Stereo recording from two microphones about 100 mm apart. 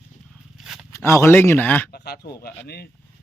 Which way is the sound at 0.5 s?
5° right (ahead or behind).